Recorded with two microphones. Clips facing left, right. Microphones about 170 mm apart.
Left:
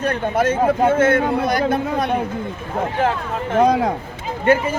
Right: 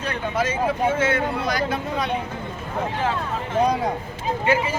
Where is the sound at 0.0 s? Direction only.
50° left (ahead or behind).